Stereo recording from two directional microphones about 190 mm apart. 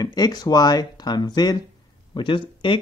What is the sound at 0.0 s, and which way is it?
Speech, 20° left (ahead or behind).